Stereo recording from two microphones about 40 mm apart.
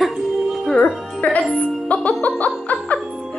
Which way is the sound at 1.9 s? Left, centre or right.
Left.